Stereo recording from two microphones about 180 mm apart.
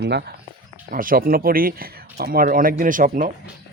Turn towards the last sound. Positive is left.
turn(degrees=-50)  # may be behind; listen again after turning